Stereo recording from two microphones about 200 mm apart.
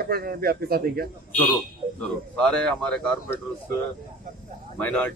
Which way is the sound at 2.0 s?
5° left (ahead or behind).